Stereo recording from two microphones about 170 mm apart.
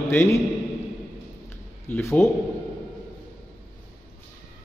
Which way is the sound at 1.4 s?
15° left (ahead or behind).